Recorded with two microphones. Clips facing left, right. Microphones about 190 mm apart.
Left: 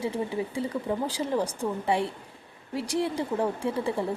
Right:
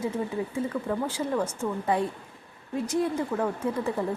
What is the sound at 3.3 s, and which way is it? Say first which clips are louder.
Speech: left 1 dB; 25° left (ahead or behind).